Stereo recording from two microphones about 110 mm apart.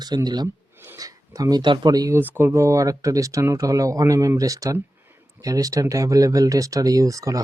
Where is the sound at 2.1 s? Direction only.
20° right (ahead or behind).